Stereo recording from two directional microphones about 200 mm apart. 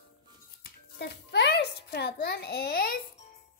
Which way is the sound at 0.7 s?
55° left (ahead or behind).